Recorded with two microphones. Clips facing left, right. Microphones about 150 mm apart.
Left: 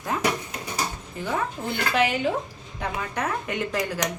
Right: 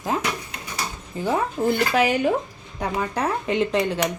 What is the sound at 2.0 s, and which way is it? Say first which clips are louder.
Speech: right 3 dB; 40° right (ahead or behind).